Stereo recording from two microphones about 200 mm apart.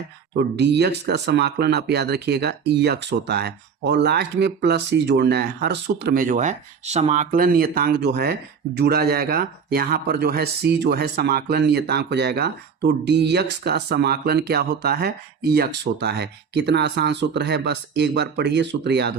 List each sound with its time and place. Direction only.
0.3 s speech: 60° right (ahead or behind)